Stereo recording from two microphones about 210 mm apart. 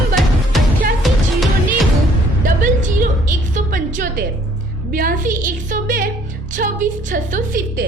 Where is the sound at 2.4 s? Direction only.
40° right (ahead or behind).